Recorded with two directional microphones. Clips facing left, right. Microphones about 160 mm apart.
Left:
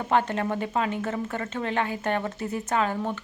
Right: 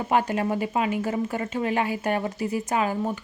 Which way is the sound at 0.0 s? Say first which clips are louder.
Right 1 dB; 10° right (ahead or behind).